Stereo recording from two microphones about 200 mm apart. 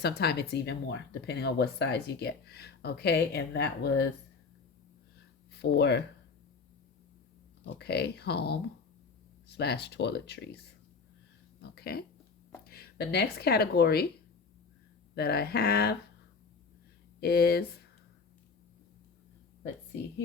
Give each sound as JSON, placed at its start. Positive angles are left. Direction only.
{"t": 0.0, "sound": "speech", "side_deg": 55}
{"t": 5.5, "sound": "speech", "side_deg": 55}
{"t": 7.6, "sound": "speech", "side_deg": 55}
{"t": 11.6, "sound": "a sound", "side_deg": 55}
{"t": 12.6, "sound": "speech", "side_deg": 50}
{"t": 15.1, "sound": "speech", "side_deg": 50}
{"t": 17.2, "sound": "speech", "side_deg": 50}